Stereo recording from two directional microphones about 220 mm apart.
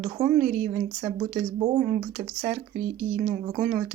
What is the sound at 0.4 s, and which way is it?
Speech, 35° right (ahead or behind).